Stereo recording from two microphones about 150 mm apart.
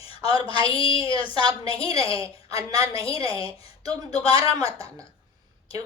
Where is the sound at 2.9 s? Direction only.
35° left (ahead or behind).